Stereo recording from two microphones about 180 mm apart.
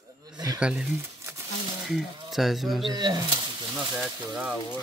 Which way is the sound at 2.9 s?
25° right (ahead or behind).